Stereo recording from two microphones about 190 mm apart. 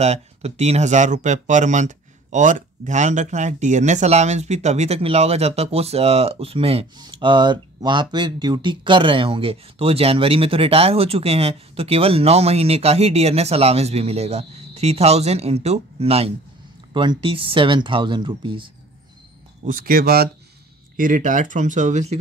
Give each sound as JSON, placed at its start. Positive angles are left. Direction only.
{"t": 0.0, "sound": "speech", "side_deg": -35}
{"t": 19.6, "sound": "speech", "side_deg": -45}